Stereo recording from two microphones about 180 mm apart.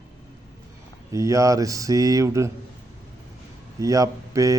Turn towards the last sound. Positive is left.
turn(degrees=-20)  # may be behind; listen again after turning